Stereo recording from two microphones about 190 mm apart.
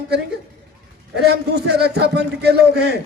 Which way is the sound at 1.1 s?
60° right (ahead or behind).